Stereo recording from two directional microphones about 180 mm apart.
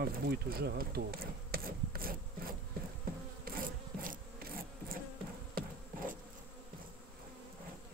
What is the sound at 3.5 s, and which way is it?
Insect, 55° right (ahead or behind).